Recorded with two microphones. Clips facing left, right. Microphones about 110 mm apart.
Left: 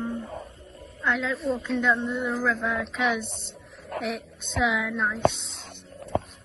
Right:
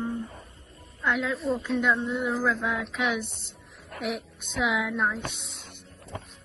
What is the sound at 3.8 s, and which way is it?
Speech, 65° left (ahead or behind).